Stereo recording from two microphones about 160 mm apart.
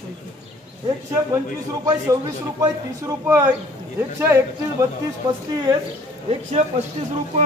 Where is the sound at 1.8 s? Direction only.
20° right (ahead or behind).